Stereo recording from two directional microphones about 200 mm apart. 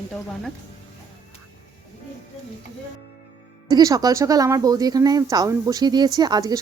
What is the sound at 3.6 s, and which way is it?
Speech, 20° right (ahead or behind).